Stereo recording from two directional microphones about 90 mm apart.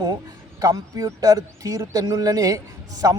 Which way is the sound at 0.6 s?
40° right (ahead or behind).